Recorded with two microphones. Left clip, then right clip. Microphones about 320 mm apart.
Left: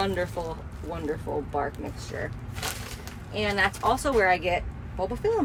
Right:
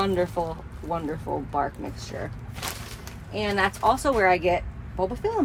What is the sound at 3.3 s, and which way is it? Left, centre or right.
Speech, centre.